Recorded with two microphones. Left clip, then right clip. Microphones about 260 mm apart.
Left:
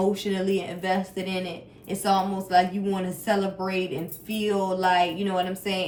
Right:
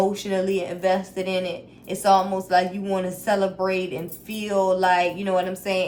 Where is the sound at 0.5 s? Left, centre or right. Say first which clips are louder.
Right 4 dB; right.